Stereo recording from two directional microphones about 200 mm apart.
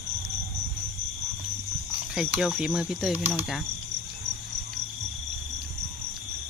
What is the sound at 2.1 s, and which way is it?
Speech, 5° right (ahead or behind).